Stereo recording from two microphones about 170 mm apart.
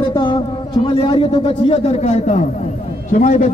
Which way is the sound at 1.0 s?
35° left (ahead or behind).